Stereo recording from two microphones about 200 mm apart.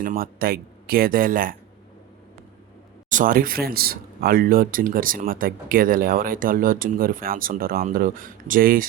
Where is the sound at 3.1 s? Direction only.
40° right (ahead or behind).